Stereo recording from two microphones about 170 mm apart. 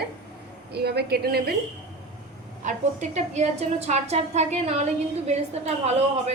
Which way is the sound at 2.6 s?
45° right (ahead or behind).